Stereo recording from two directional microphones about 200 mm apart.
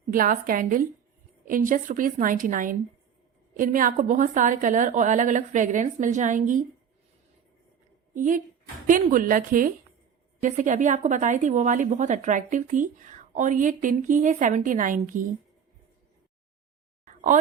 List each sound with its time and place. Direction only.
0.1 s a woman's voice: 45° right (ahead or behind)
8.1 s a woman's voice: 40° right (ahead or behind)
17.1 s a sound: 40° right (ahead or behind)